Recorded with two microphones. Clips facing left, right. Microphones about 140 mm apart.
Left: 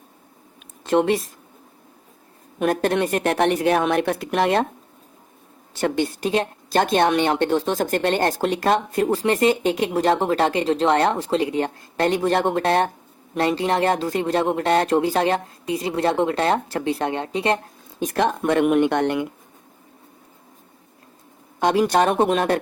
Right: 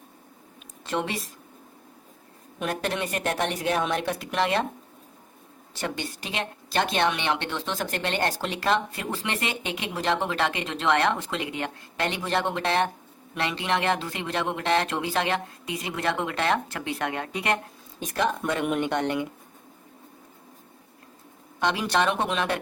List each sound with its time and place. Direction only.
0.9 s a woman's voice: 50° left (ahead or behind)
2.6 s a woman's voice: 50° left (ahead or behind)
5.8 s a woman's voice: 45° left (ahead or behind); by 17.6 s 30° left (ahead or behind)
18.0 s a woman's voice: 55° left (ahead or behind)
21.6 s a woman's voice: 45° left (ahead or behind)